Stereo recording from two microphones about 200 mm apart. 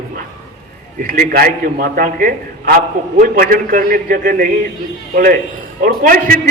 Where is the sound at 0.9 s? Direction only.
45° right (ahead or behind).